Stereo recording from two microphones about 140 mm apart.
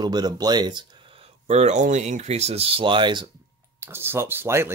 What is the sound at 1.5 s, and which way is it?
Speech, 55° right (ahead or behind).